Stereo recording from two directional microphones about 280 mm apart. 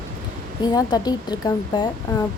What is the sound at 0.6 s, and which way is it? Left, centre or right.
A woman's voice, centre.